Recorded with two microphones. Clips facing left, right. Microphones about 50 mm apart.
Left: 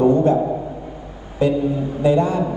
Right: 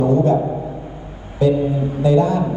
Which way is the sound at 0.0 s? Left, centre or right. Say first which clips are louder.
Left 1 dB; left.